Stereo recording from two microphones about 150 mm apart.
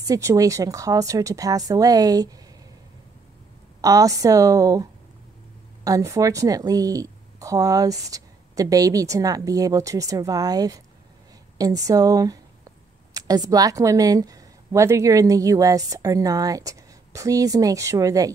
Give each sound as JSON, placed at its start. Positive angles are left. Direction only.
{"t": 0.0, "sound": "a woman's voice", "side_deg": -20}
{"t": 3.8, "sound": "a woman's voice", "side_deg": -25}
{"t": 5.9, "sound": "a woman's voice", "side_deg": -20}